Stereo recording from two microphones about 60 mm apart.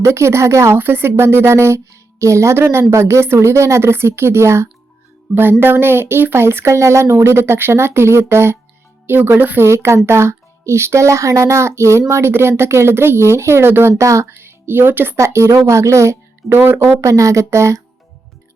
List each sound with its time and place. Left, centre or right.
0.0 s speech: right
0.8 s speech: right
5.3 s speech: right
9.6 s speech: right
14.0 s speech: right
14.3 s speech: right
15.2 s speech: right
16.5 s speech: right
17.0 s speech: right